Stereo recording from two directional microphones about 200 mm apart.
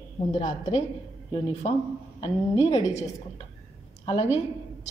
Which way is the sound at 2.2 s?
35° left (ahead or behind).